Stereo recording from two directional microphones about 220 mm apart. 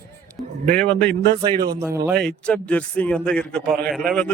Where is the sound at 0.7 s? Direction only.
5° left (ahead or behind).